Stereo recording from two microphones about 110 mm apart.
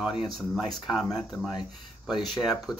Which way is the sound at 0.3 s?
Centre (ahead or behind).